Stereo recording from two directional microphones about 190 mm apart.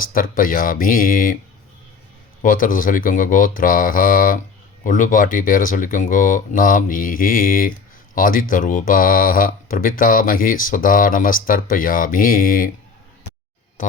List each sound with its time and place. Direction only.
0.0 s speech: 45° left (ahead or behind)
2.4 s speech: 45° left (ahead or behind)